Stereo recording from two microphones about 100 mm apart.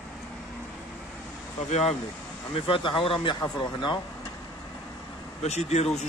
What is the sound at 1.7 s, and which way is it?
Speech, 90° left.